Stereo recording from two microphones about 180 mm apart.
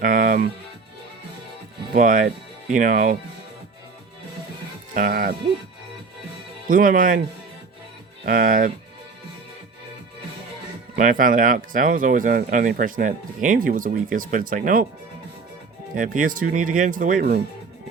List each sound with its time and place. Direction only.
0.0 s music: 50° right (ahead or behind)
1.9 s speech: 50° right (ahead or behind)
4.9 s speech: 50° right (ahead or behind)
6.7 s speech: 50° right (ahead or behind)
8.2 s speech: 50° right (ahead or behind)
10.9 s speech: 50° right (ahead or behind)
16.0 s speech: 50° right (ahead or behind)